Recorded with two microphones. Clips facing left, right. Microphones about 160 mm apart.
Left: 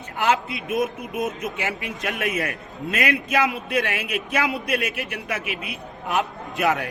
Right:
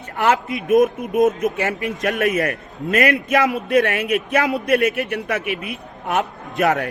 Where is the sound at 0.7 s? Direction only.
45° right (ahead or behind).